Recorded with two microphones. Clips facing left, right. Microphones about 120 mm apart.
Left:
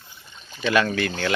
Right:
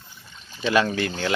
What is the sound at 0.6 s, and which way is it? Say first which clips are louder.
Speech: even; 25° right (ahead or behind).